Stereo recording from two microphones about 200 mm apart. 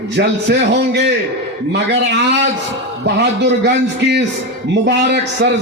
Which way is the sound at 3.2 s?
60° right (ahead or behind).